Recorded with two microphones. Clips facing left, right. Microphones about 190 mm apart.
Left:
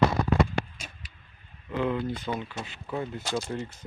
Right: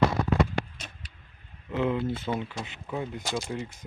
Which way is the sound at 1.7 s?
25° right (ahead or behind).